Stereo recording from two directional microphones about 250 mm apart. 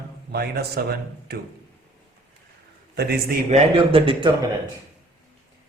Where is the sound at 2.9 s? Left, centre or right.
Right.